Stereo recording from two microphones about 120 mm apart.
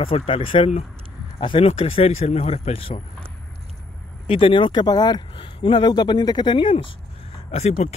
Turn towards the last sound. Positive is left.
turn(degrees=55)  # may be behind; listen again after turning